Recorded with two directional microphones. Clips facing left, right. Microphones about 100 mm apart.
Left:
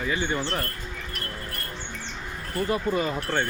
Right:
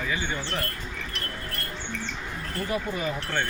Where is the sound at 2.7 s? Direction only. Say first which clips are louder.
Left 4 dB; 40° left (ahead or behind).